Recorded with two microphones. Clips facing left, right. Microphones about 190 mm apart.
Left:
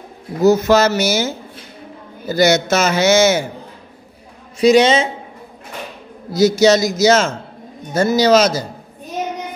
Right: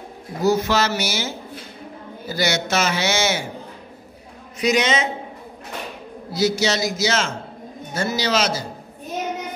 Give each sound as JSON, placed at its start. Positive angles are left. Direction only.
{"t": 0.4, "sound": "a man's voice", "side_deg": 45}
{"t": 4.6, "sound": "a man's voice", "side_deg": 30}
{"t": 6.3, "sound": "a man's voice", "side_deg": 45}